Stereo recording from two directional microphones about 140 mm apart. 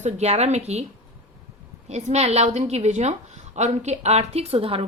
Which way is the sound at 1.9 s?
50° right (ahead or behind).